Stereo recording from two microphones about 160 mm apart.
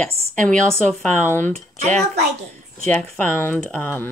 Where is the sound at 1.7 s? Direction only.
45° right (ahead or behind).